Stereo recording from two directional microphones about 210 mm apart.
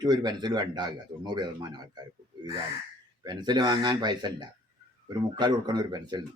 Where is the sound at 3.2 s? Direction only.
20° right (ahead or behind).